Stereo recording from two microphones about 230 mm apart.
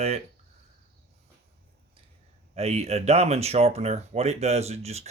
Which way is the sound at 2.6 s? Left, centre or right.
Right.